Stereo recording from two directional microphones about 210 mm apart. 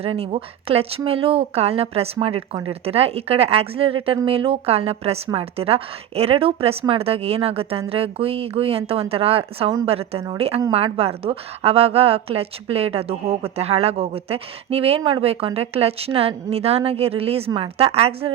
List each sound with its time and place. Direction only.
0.0 s a woman's voice: 25° right (ahead or behind)